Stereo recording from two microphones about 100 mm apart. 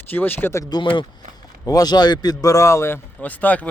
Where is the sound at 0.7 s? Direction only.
50° left (ahead or behind).